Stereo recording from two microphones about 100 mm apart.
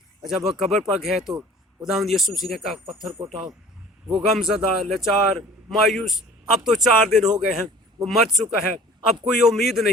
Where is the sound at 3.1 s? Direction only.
35° right (ahead or behind).